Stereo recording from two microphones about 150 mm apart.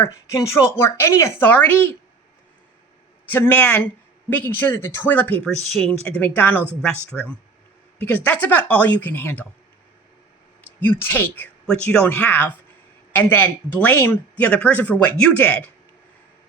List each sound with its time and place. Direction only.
0.0 s speech: 20° left (ahead or behind)
3.3 s speech: 10° left (ahead or behind)
10.8 s speech: 15° left (ahead or behind)